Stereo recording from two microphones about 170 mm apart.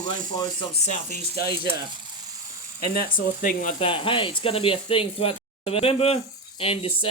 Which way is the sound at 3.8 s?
30° left (ahead or behind).